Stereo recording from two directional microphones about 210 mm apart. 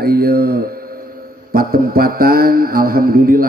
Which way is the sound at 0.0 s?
45° right (ahead or behind).